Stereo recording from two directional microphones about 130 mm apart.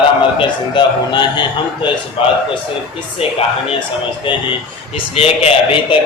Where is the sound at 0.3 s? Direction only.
35° left (ahead or behind).